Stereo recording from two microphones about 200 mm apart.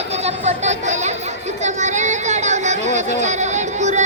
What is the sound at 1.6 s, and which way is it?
Chatter, 35° right (ahead or behind).